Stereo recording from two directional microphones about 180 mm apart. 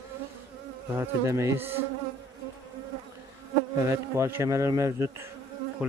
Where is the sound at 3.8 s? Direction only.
15° right (ahead or behind).